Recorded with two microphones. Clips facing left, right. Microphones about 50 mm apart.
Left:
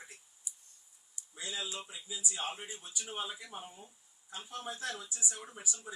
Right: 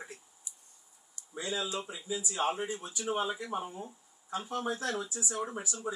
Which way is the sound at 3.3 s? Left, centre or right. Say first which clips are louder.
Right 10 dB; right.